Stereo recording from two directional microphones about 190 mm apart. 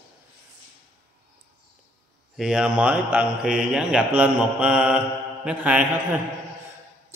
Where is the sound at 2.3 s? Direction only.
5° right (ahead or behind).